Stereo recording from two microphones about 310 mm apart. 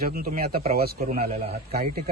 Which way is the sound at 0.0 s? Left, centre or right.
Right.